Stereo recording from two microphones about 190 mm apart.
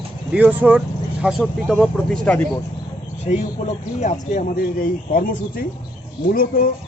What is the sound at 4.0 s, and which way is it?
Speech, 40° left (ahead or behind).